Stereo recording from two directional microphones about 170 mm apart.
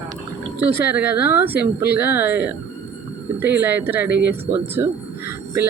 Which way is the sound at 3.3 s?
10° right (ahead or behind).